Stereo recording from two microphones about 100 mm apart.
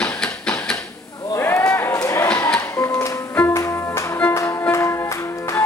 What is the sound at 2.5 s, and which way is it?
Music, 25° left (ahead or behind).